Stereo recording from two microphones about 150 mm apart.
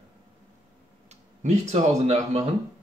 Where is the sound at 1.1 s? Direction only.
50° right (ahead or behind).